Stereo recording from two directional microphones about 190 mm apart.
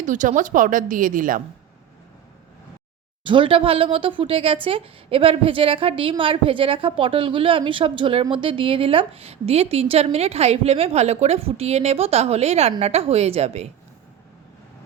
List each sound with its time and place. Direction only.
0.0 s a woman's voice: 40° right (ahead or behind)
3.2 s a woman's voice: 25° right (ahead or behind)